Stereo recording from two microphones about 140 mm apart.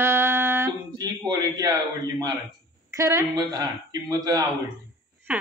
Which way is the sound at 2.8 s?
20° right (ahead or behind).